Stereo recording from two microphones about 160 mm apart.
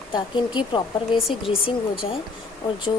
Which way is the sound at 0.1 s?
30° left (ahead or behind).